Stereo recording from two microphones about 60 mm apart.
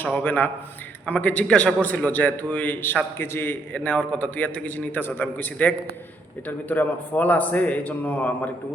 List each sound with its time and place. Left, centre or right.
0.0 s a man's voice: left
3.8 s a man's voice: left